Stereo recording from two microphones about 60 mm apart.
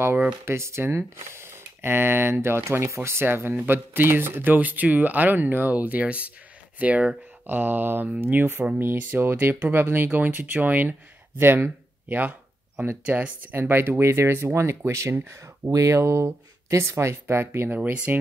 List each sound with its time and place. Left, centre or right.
0.5 s speech: right
7.4 s speech: right
17.6 s speech: right